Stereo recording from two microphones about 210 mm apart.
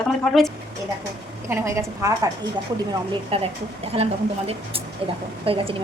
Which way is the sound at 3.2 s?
25° right (ahead or behind).